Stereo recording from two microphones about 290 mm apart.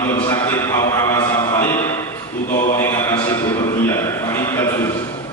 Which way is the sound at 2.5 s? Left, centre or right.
Left.